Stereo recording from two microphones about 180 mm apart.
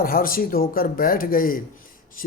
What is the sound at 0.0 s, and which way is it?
Speech, 50° left (ahead or behind).